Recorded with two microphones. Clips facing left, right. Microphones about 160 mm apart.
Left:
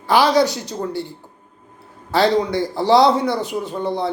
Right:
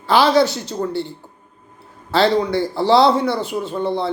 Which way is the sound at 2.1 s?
15° left (ahead or behind).